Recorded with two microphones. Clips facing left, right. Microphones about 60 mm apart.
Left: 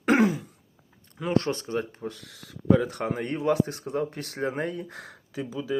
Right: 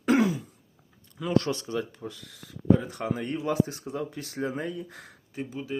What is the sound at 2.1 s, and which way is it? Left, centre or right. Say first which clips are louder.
Speech: even; left.